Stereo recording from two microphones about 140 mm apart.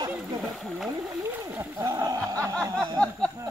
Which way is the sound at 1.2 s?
20° right (ahead or behind).